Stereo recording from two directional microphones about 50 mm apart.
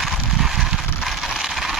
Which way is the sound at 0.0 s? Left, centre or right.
Centre.